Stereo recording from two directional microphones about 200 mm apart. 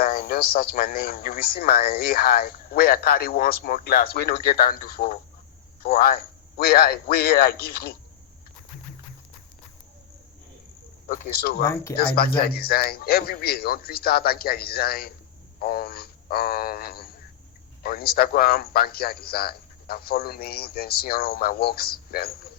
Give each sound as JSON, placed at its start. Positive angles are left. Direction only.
{"t": 0.0, "sound": "a man's voice", "side_deg": 50}
{"t": 11.1, "sound": "a man's voice", "side_deg": 50}
{"t": 11.6, "sound": "speech", "side_deg": 15}
{"t": 11.9, "sound": "a man's voice", "side_deg": 50}